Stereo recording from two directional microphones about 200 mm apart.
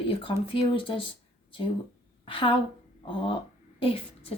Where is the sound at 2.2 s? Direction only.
25° left (ahead or behind).